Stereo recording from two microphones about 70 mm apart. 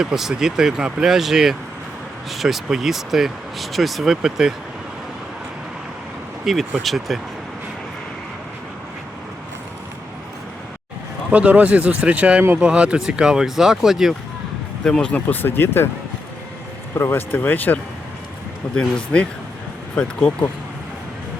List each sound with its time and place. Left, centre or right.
0.0 s speech: centre
6.4 s speech: centre
11.3 s speech: right; by 14.2 s centre
14.8 s speech: centre
15.1 s speech: left
17.0 s speech: left
18.8 s speech: centre